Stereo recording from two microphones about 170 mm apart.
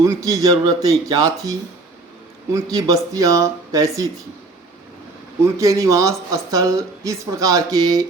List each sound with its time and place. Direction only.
0.0 s speech: 20° right (ahead or behind)
5.5 s speech: 20° right (ahead or behind)